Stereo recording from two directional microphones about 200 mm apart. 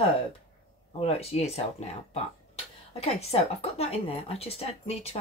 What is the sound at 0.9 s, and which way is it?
A woman's voice, 30° left (ahead or behind).